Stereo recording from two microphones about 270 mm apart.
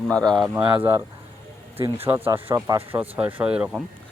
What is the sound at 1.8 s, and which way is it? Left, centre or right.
Speech, right.